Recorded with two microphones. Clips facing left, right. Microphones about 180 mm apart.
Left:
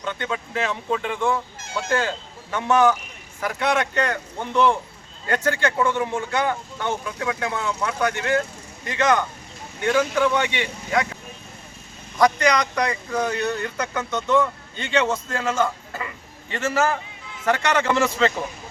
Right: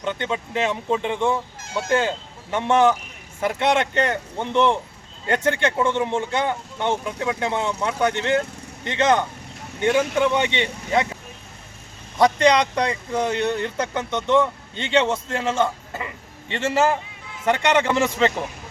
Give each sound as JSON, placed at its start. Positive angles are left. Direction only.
{"t": 0.0, "sound": "speech", "side_deg": -20}
{"t": 12.1, "sound": "a man's voice", "side_deg": -25}